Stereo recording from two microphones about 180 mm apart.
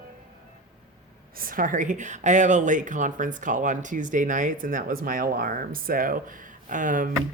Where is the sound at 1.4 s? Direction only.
50° right (ahead or behind).